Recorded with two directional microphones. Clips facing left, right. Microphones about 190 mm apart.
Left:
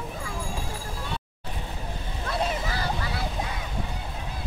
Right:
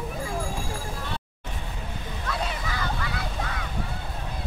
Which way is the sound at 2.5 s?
35° left (ahead or behind).